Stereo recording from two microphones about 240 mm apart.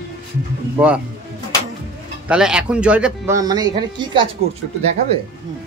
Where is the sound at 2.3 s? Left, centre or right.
Centre.